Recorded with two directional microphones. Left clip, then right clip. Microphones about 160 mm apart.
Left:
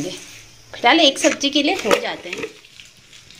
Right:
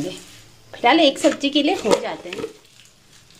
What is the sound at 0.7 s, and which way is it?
Speech, 20° right (ahead or behind).